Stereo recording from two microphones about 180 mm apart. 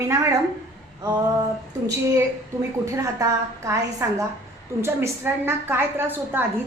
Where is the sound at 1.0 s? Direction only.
20° right (ahead or behind).